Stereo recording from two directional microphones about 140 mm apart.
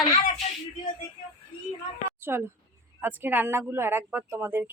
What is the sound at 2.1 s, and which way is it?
Speech, 15° right (ahead or behind).